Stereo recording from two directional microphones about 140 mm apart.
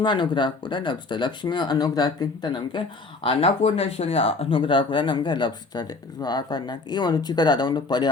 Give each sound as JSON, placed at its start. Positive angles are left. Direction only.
{"t": 0.0, "sound": "speech", "side_deg": 35}
{"t": 3.2, "sound": "speech", "side_deg": 45}